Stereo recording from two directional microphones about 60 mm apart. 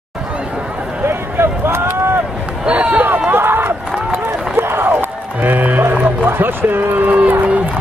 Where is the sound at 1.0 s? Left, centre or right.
Right.